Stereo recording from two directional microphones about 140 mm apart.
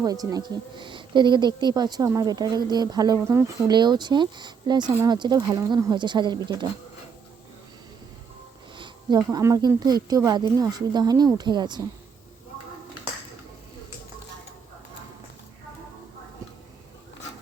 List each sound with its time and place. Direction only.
0.0 s speech: 25° right (ahead or behind)
3.7 s speech: 30° right (ahead or behind)
8.7 s speech: 35° right (ahead or behind)